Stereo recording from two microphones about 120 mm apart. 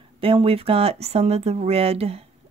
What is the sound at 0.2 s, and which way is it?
Speech, 50° right (ahead or behind).